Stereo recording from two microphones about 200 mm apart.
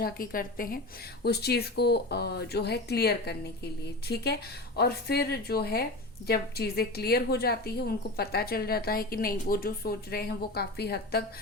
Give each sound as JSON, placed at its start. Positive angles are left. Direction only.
{"t": 0.0, "sound": "a woman's voice", "side_deg": 45}